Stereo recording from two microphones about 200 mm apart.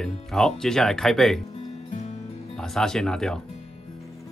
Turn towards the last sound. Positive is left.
turn(degrees=5)  # may be behind; listen again after turning